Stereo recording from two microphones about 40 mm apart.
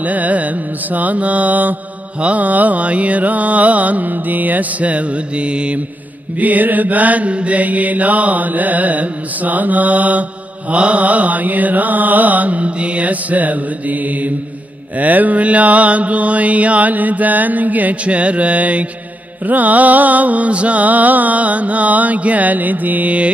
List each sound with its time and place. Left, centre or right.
0.0 s music: right
6.3 s music: right
18.0 s music: right